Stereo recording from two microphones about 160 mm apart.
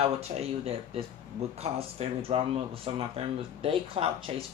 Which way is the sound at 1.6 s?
40° right (ahead or behind).